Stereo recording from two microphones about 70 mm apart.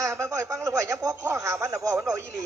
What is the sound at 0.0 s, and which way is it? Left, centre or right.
A woman's voice, right.